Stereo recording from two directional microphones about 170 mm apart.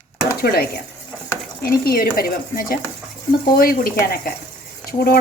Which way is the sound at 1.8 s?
60° left (ahead or behind).